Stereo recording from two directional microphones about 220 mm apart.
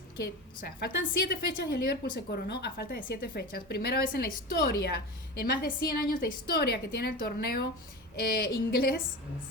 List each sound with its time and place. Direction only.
0.2 s a woman's voice: 45° left (ahead or behind)